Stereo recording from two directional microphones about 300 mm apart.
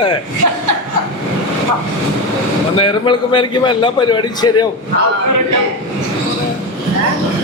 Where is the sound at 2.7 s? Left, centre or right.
Centre.